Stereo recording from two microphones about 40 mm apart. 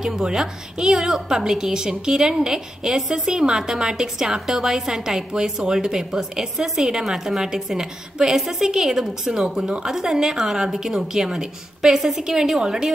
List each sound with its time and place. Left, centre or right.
0.0 s a woman's voice: centre